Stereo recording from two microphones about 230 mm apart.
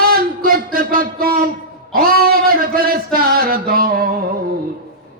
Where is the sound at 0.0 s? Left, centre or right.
Right.